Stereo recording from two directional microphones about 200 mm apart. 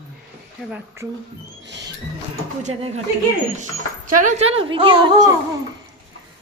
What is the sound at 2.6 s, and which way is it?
Speech, 35° right (ahead or behind).